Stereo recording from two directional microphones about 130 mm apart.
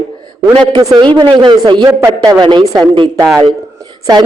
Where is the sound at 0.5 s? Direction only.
35° right (ahead or behind).